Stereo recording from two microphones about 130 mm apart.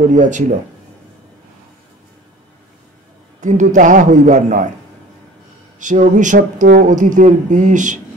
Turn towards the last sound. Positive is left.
turn(degrees=-75)  # may be behind; listen again after turning